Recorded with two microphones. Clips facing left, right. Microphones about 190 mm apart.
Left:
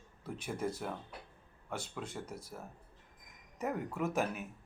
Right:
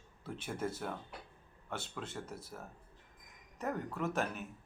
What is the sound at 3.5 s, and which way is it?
Speech, 5° left (ahead or behind).